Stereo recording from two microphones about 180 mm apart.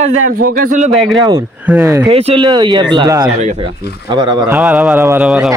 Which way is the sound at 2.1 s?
35° right (ahead or behind).